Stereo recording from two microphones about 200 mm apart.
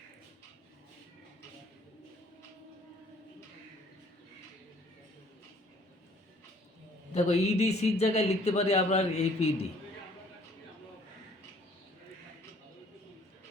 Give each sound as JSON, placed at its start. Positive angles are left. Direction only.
{"t": 7.1, "sound": "a man's voice", "side_deg": 35}